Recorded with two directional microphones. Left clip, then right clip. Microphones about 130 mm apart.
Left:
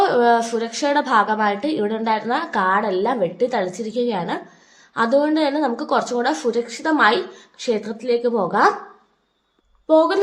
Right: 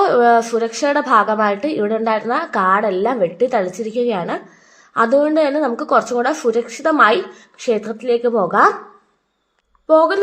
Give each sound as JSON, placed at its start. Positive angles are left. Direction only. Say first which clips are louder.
{"t": 0.0, "sound": "a woman's voice", "louder": "right 3 dB", "side_deg": -25}
{"t": 9.8, "sound": "speech", "louder": "right 3 dB", "side_deg": -10}